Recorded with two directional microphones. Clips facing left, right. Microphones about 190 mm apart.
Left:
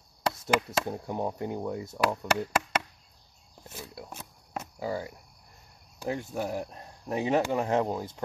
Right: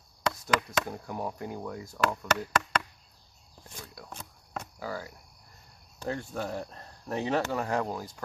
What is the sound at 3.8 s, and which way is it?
Speech, 20° left (ahead or behind).